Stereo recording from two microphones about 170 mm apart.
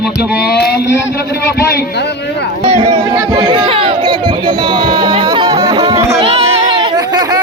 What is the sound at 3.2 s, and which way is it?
Speech, 25° right (ahead or behind).